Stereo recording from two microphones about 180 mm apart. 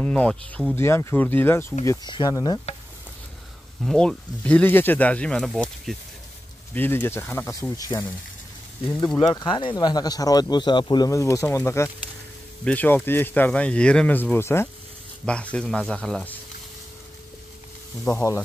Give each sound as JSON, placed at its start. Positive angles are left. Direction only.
{"t": 0.0, "sound": "speech", "side_deg": 5}
{"t": 1.9, "sound": "speech", "side_deg": 25}
{"t": 3.8, "sound": "speech", "side_deg": 0}
{"t": 9.2, "sound": "speech", "side_deg": 25}
{"t": 18.0, "sound": "speech", "side_deg": 15}